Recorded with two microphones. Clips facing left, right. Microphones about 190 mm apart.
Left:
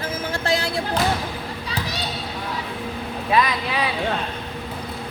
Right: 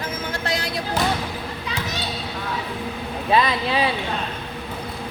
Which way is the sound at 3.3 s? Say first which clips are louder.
Right 2 dB; 25° right (ahead or behind).